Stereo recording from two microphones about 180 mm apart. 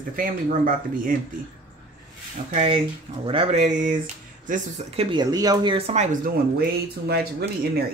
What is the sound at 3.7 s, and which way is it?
Speech, 45° right (ahead or behind).